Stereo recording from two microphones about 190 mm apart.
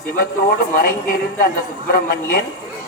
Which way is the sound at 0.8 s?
50° left (ahead or behind).